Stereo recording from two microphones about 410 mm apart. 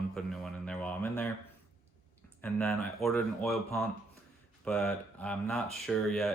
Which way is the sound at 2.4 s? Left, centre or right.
Centre.